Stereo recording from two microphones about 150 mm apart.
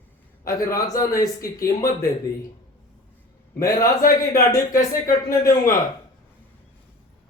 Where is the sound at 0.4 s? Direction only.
20° left (ahead or behind).